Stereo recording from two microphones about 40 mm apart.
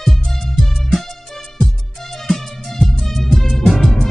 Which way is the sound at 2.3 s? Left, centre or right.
Centre.